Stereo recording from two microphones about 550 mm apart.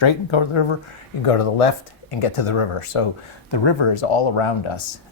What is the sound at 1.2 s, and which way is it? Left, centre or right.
Speech, left.